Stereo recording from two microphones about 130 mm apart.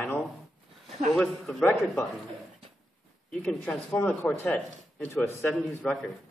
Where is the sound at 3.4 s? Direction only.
5° left (ahead or behind).